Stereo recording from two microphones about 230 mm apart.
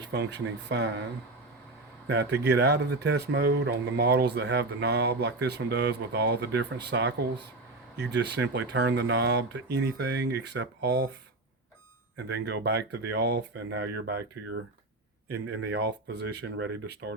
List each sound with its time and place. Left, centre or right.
0.0 s speech: right
2.0 s speech: right
12.1 s speech: right